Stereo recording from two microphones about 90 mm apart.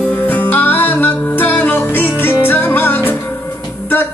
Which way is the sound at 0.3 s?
20° left (ahead or behind).